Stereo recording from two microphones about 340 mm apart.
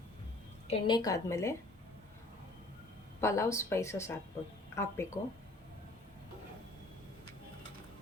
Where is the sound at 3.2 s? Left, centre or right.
Centre.